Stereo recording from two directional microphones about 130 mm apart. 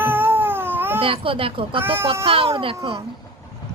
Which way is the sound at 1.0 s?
45° right (ahead or behind).